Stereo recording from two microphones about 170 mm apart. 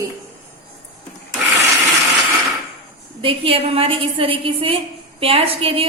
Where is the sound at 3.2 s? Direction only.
35° right (ahead or behind).